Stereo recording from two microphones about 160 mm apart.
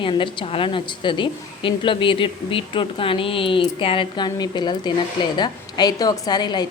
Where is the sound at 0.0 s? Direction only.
30° left (ahead or behind).